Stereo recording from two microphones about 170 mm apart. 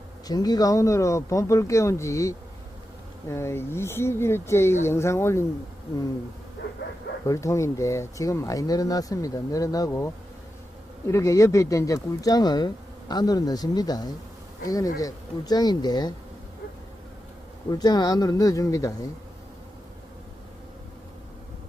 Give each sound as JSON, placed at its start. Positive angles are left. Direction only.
{"t": 0.3, "sound": "speech", "side_deg": 25}
{"t": 7.3, "sound": "speech", "side_deg": 20}
{"t": 11.1, "sound": "speech", "side_deg": 15}
{"t": 17.7, "sound": "speech", "side_deg": 25}